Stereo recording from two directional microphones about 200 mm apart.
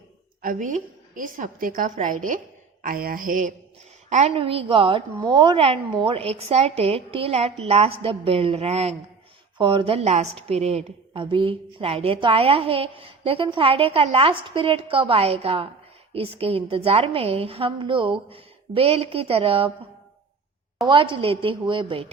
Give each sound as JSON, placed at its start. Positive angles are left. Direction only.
{"t": 0.4, "sound": "a woman's voice", "side_deg": -40}
{"t": 4.1, "sound": "a woman's voice", "side_deg": -30}
{"t": 20.8, "sound": "a woman's voice", "side_deg": -25}